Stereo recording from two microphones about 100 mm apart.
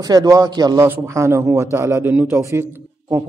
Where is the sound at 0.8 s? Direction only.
30° right (ahead or behind).